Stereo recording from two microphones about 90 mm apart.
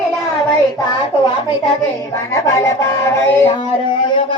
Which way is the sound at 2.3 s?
35° left (ahead or behind).